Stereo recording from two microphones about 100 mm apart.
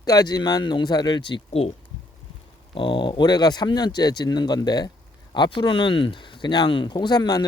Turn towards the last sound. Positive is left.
turn(degrees=40)  # may be behind; listen again after turning